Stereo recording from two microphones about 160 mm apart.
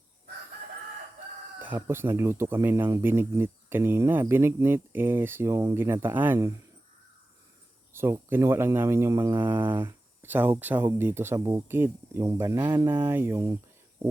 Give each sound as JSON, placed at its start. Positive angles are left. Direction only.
{"t": 1.5, "sound": "speech", "side_deg": -10}
{"t": 7.9, "sound": "speech", "side_deg": -15}
{"t": 12.9, "sound": "speech", "side_deg": -10}